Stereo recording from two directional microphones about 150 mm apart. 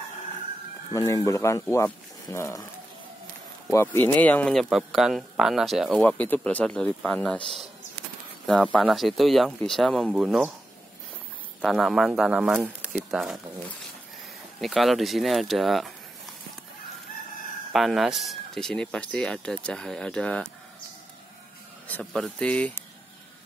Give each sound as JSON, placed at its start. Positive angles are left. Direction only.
{"t": 0.9, "sound": "speech", "side_deg": 20}
{"t": 3.7, "sound": "speech", "side_deg": 15}
{"t": 8.7, "sound": "speech", "side_deg": 0}
{"t": 11.6, "sound": "speech", "side_deg": 0}
{"t": 14.6, "sound": "speech", "side_deg": 0}
{"t": 17.7, "sound": "speech", "side_deg": 0}
{"t": 21.8, "sound": "speech", "side_deg": 5}